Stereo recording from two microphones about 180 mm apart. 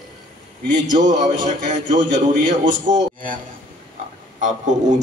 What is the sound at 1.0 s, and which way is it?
A man's voice, 45° right (ahead or behind).